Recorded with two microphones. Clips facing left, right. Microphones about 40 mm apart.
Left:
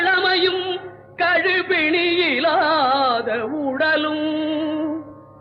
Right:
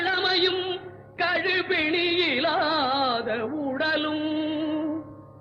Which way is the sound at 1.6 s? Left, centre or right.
Left.